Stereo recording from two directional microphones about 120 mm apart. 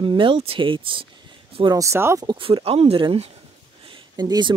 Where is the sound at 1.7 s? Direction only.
25° right (ahead or behind).